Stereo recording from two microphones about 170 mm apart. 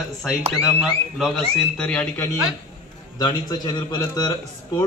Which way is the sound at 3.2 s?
25° left (ahead or behind).